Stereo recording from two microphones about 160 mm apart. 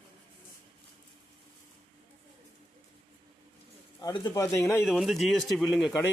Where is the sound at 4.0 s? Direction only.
25° left (ahead or behind).